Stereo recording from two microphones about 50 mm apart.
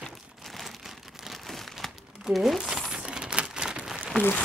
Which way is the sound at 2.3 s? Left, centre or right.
Centre.